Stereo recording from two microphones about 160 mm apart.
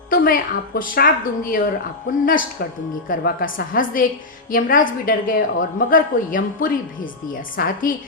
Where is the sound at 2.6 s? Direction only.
75° left (ahead or behind).